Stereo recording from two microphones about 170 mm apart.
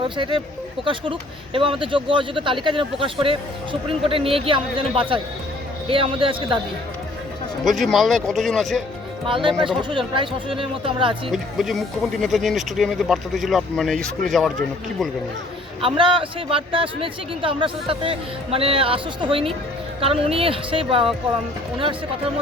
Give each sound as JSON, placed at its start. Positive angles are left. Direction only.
{"t": 0.2, "sound": "speech", "side_deg": -30}
{"t": 1.5, "sound": "speech", "side_deg": -30}
{"t": 7.6, "sound": "speech", "side_deg": 0}
{"t": 9.2, "sound": "speech", "side_deg": -30}
{"t": 11.3, "sound": "speech", "side_deg": 0}
{"t": 15.8, "sound": "speech", "side_deg": -30}